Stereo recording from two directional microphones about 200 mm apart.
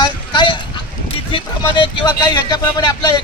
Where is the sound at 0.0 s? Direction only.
25° left (ahead or behind).